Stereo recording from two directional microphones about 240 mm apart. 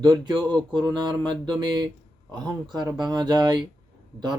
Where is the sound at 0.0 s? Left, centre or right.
Centre.